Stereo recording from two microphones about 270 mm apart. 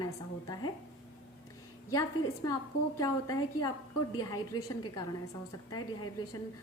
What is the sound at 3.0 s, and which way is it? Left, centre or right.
A woman's voice, centre.